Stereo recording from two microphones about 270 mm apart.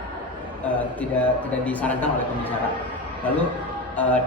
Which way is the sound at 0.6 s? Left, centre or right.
Centre.